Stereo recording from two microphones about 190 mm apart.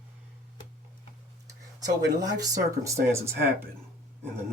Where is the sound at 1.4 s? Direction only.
20° right (ahead or behind).